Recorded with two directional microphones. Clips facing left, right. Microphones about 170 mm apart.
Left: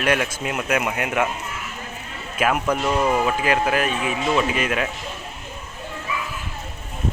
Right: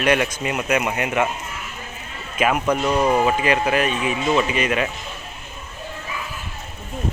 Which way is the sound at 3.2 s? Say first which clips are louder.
Right 2 dB; centre (ahead or behind).